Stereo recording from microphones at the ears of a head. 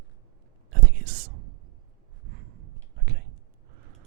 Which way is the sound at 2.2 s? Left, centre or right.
Right.